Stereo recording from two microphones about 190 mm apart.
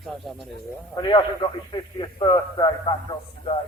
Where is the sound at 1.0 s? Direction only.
25° left (ahead or behind).